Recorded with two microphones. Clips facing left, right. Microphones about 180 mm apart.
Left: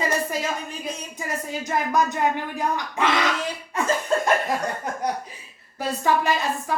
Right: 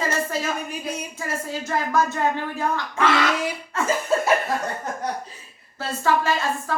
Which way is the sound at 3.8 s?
15° left (ahead or behind).